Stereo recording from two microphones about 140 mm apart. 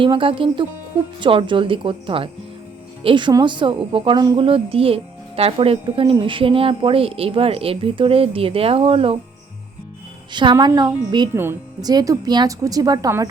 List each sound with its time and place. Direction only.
0.0 s a woman's voice: 40° right (ahead or behind)
10.3 s a woman's voice: 30° right (ahead or behind)